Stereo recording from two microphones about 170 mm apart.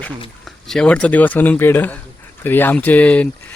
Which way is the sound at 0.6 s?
5° left (ahead or behind).